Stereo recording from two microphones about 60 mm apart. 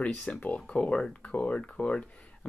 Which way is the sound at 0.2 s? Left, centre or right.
Left.